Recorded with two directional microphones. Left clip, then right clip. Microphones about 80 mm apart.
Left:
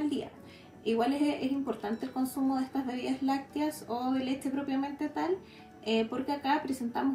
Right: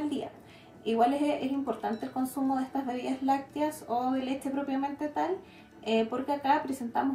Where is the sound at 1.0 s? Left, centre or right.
Right.